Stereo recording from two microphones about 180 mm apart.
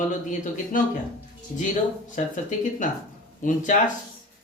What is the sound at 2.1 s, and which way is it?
Speech, 45° left (ahead or behind).